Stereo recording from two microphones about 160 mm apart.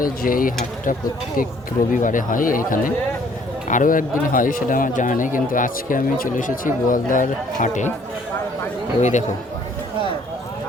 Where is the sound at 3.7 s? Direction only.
55° left (ahead or behind).